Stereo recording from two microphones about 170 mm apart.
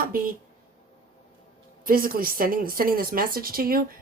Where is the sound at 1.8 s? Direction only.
55° right (ahead or behind).